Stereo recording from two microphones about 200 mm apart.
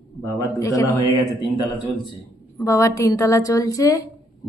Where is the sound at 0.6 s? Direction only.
15° left (ahead or behind).